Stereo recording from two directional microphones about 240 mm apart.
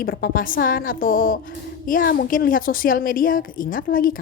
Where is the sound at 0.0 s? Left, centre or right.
Left.